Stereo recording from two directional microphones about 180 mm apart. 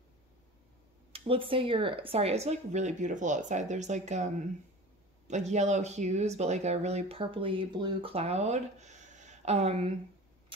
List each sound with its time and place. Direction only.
1.1 s speech: 30° right (ahead or behind)